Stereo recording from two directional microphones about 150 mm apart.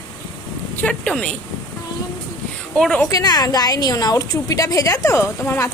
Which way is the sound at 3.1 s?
25° left (ahead or behind).